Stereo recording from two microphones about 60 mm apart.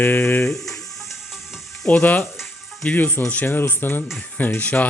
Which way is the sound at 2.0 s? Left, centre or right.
Left.